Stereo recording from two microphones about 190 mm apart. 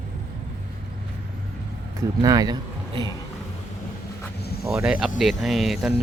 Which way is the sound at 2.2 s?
20° right (ahead or behind).